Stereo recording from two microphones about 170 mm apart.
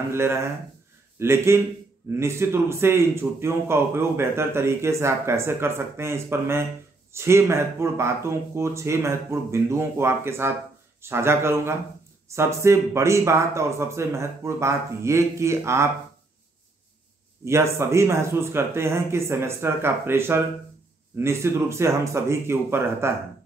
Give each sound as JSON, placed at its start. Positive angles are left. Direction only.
{"t": 0.1, "sound": "a man's voice", "side_deg": -15}
{"t": 17.5, "sound": "a man's voice", "side_deg": -15}